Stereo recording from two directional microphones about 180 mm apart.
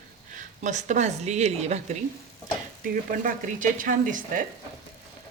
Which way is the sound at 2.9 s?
50° right (ahead or behind).